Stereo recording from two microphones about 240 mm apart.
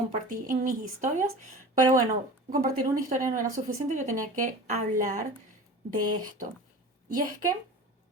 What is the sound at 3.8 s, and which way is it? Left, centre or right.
A woman's voice, right.